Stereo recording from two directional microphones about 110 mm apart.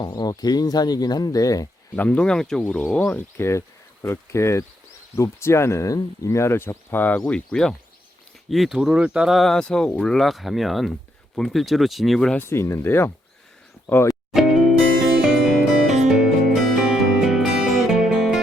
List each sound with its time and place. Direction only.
0.0 s speech: 40° left (ahead or behind)
2.0 s speech: 10° left (ahead or behind)
12.4 s speech: 25° left (ahead or behind)
15.2 s music: 5° right (ahead or behind)